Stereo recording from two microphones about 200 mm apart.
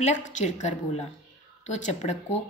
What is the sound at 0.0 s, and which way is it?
Speech, 35° left (ahead or behind).